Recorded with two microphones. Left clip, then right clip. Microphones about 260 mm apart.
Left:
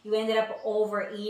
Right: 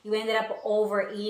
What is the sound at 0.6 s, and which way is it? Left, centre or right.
Speech, right.